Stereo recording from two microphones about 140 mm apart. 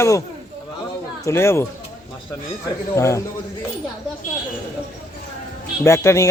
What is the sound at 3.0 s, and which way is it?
Speech, 20° left (ahead or behind).